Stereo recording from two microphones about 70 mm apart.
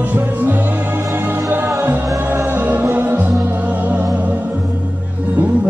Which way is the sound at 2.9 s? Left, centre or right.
Right.